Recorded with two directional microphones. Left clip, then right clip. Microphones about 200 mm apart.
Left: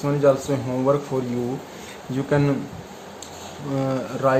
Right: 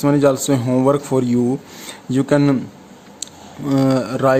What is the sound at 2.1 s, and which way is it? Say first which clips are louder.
Speech: right 6 dB; 60° right (ahead or behind).